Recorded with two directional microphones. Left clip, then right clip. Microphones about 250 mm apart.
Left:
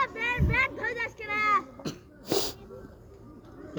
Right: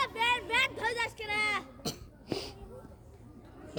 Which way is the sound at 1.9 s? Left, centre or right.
Right.